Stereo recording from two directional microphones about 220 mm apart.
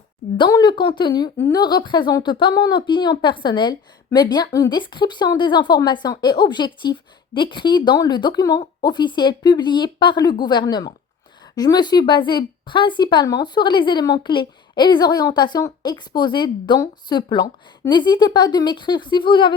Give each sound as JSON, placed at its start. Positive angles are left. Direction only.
{"t": 0.3, "sound": "a woman's voice", "side_deg": 20}